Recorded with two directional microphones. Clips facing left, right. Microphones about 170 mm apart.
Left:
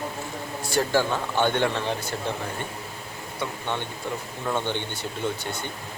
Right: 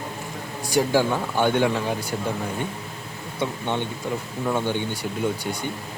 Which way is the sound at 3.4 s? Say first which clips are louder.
Right 4 dB; 15° right (ahead or behind).